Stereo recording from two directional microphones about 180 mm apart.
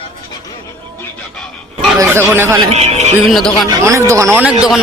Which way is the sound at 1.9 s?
15° right (ahead or behind).